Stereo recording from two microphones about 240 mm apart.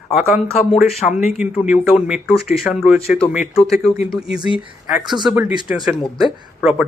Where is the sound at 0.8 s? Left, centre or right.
Centre.